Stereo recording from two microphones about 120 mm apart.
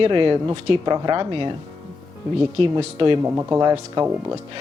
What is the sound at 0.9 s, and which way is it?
Speech, 35° right (ahead or behind).